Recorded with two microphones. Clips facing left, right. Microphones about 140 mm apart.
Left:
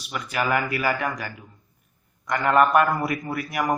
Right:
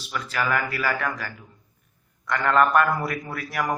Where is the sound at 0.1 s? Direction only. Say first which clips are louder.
Left 1 dB; 15° left (ahead or behind).